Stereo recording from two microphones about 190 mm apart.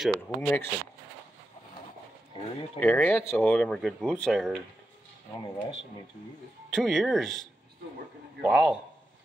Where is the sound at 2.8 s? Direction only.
10° left (ahead or behind).